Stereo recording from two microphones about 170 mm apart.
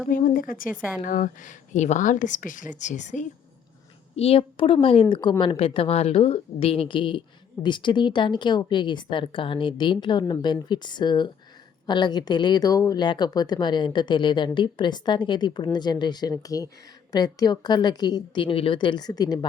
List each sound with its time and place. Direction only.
0.1 s speech: 55° left (ahead or behind); by 19.5 s 25° left (ahead or behind)